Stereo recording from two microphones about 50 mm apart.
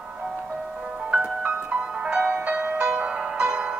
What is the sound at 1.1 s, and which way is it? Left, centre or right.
Music, right.